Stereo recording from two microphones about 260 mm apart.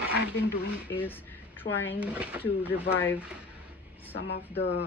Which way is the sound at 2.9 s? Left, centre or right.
Centre.